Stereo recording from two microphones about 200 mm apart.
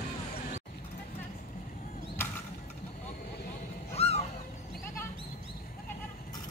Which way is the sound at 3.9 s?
30° left (ahead or behind).